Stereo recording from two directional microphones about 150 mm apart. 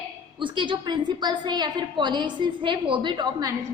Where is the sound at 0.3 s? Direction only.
35° right (ahead or behind).